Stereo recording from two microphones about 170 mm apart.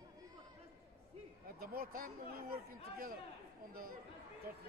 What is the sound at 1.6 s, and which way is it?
Speech, 60° right (ahead or behind).